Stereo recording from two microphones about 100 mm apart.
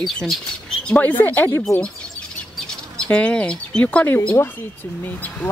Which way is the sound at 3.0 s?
10° left (ahead or behind).